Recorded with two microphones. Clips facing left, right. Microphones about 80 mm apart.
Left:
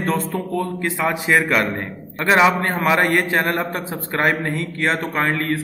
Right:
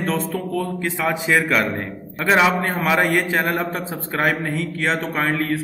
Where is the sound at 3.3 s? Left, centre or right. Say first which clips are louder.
Left 1 dB; centre.